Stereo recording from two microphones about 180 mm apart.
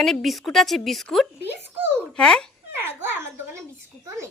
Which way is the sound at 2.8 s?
15° right (ahead or behind).